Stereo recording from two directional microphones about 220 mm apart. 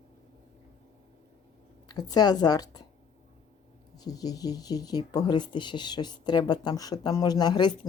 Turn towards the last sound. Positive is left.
turn(degrees=20)  # may be behind; listen again after turning